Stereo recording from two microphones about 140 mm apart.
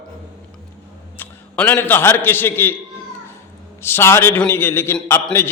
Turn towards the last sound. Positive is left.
turn(degrees=15)  # may be behind; listen again after turning